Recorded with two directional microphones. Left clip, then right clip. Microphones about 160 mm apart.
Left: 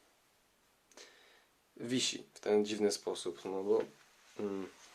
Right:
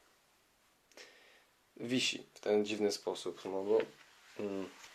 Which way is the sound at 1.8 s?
15° left (ahead or behind).